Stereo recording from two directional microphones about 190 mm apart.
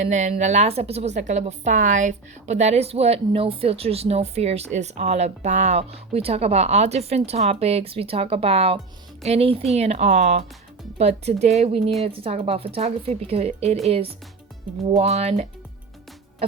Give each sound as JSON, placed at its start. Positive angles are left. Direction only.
{"t": 0.0, "sound": "a woman's voice", "side_deg": -40}